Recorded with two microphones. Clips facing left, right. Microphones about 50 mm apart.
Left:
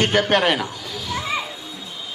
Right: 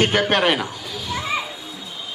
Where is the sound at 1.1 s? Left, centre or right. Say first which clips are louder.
Even; centre.